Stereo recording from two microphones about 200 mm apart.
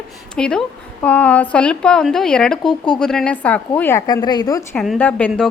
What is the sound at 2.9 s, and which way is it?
A woman's voice, 5° left (ahead or behind).